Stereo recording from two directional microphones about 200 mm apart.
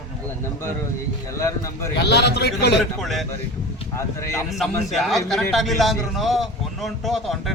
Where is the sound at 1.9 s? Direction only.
55° left (ahead or behind).